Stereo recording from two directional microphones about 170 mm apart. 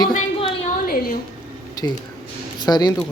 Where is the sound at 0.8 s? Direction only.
55° left (ahead or behind).